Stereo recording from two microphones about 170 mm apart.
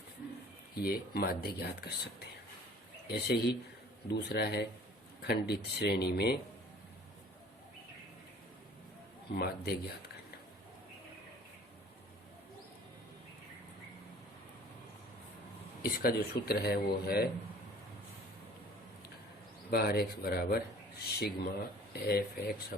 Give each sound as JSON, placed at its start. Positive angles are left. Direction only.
{"t": 0.8, "sound": "speech", "side_deg": 65}
{"t": 9.3, "sound": "speech", "side_deg": 65}
{"t": 15.8, "sound": "speech", "side_deg": 65}
{"t": 19.7, "sound": "speech", "side_deg": 70}